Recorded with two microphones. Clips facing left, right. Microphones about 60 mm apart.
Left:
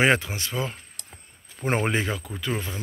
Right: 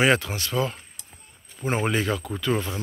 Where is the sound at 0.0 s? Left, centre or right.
Left.